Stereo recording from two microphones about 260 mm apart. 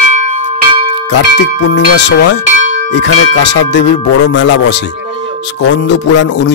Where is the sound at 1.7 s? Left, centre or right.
Left.